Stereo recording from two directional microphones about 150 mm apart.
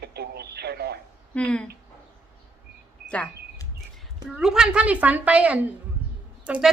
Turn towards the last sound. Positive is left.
turn(degrees=-10)  # may be behind; listen again after turning